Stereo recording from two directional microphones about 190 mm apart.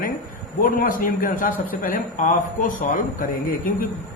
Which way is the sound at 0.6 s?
50° left (ahead or behind).